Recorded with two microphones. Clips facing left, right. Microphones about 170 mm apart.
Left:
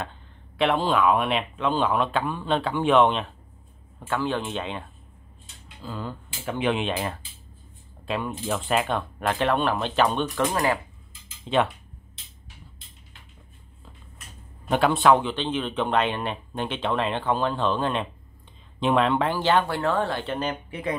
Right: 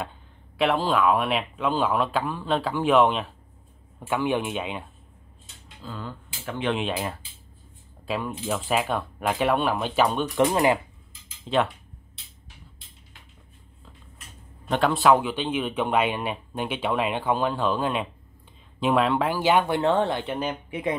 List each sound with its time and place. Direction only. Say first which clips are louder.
0.6 s speech: even; centre (ahead or behind)
4.1 s speech: right 2 dB; 15° right (ahead or behind)
5.8 s speech: left 2 dB; 10° left (ahead or behind)
6.7 s speech: right 2 dB; centre (ahead or behind)
10.3 s speech: right 4 dB; 20° right (ahead or behind)
11.4 s speech: left 1 dB; centre (ahead or behind)
14.7 s speech: left 1 dB; centre (ahead or behind)